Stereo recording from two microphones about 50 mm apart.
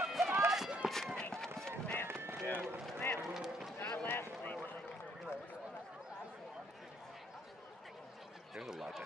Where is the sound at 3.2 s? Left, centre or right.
Centre.